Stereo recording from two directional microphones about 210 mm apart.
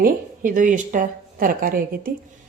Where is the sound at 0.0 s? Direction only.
40° right (ahead or behind).